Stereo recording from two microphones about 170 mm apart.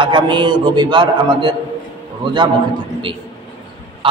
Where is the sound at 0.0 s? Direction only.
25° right (ahead or behind).